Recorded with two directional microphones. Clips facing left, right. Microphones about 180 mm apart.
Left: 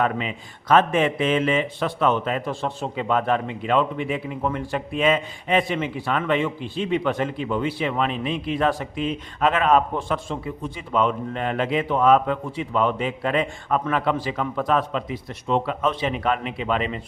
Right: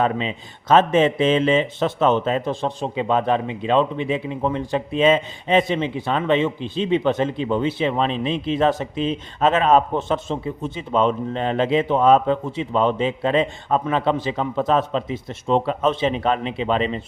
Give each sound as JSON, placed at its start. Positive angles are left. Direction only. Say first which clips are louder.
{"t": 0.0, "sound": "speech", "louder": "right 2 dB", "side_deg": -25}